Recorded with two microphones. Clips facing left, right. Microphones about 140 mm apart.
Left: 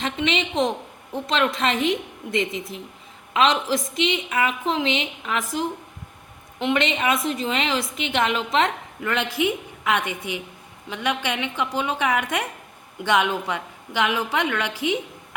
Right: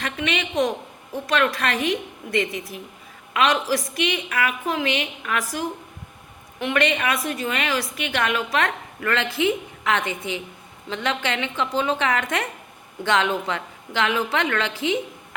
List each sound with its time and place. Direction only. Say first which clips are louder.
0.0 s a woman's voice: left 2 dB; 25° left (ahead or behind)